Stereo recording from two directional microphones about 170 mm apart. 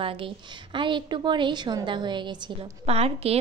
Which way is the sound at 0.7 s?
30° right (ahead or behind).